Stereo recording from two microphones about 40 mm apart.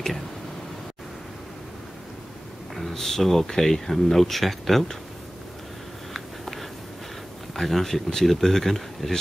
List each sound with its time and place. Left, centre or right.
2.7 s speech: centre
6.1 s a sound: centre
7.5 s speech: centre